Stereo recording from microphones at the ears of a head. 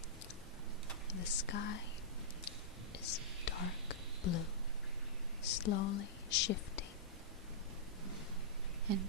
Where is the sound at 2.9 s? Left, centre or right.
Left.